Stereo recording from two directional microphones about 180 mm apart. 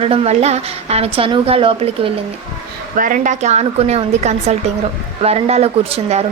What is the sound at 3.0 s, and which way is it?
A woman's voice, 50° right (ahead or behind).